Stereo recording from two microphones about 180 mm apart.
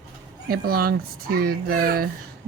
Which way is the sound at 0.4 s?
55° right (ahead or behind).